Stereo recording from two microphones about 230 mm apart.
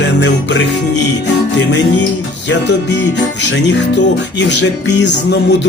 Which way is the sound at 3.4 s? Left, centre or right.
Left.